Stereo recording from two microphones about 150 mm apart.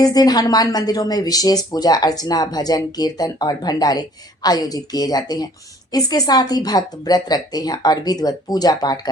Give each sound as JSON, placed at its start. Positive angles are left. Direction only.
{"t": 0.0, "sound": "speech", "side_deg": 25}